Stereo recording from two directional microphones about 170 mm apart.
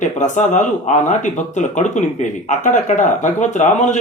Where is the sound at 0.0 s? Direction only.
45° left (ahead or behind).